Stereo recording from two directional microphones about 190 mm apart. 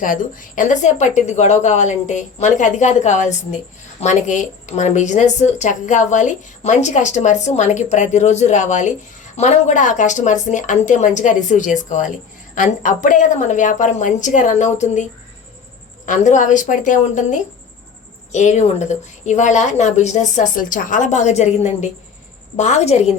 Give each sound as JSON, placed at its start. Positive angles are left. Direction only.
{"t": 0.0, "sound": "speech", "side_deg": 45}
{"t": 16.0, "sound": "speech", "side_deg": 40}